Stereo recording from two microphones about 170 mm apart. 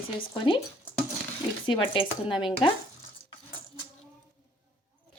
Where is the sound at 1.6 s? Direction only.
30° left (ahead or behind).